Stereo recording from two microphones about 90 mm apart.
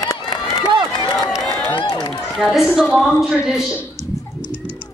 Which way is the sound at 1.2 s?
5° left (ahead or behind).